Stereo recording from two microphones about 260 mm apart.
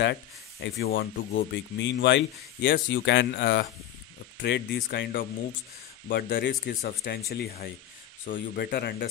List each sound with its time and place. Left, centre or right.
0.0 s speech: left